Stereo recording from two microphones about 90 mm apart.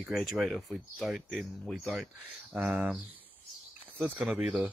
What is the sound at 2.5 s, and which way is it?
Speech, 20° right (ahead or behind).